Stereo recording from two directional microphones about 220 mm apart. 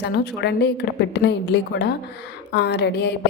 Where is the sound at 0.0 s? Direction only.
50° left (ahead or behind).